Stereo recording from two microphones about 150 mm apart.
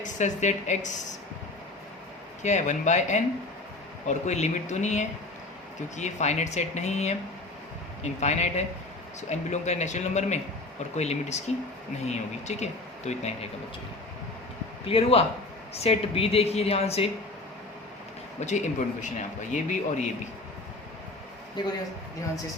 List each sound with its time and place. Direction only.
0.0 s speech: 55° left (ahead or behind)
2.4 s speech: 50° left (ahead or behind)
8.2 s speech: 50° left (ahead or behind)
14.8 s a man's voice: 40° left (ahead or behind)
18.3 s speech: 50° left (ahead or behind)
21.6 s a man's voice: 30° left (ahead or behind)